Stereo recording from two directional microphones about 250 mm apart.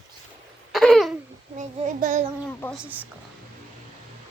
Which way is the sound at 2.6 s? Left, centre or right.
Centre.